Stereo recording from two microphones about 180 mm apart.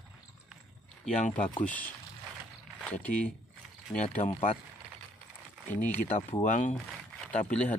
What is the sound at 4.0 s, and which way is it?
Speech, 45° left (ahead or behind).